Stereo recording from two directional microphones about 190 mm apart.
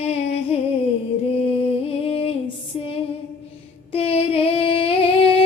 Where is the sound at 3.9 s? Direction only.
30° left (ahead or behind).